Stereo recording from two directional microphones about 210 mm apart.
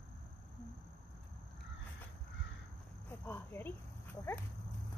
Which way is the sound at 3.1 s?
10° left (ahead or behind).